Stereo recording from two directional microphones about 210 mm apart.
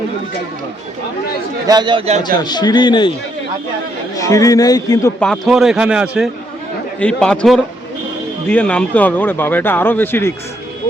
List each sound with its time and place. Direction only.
1.6 s speech: 20° right (ahead or behind)
2.2 s a man's voice: 20° left (ahead or behind)
4.2 s speech: 15° left (ahead or behind)
5.2 s a man's voice: centre (ahead or behind)